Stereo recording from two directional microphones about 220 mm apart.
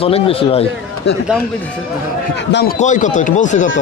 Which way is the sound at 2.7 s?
35° left (ahead or behind).